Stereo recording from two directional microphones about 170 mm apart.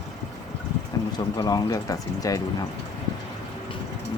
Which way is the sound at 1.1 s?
25° left (ahead or behind).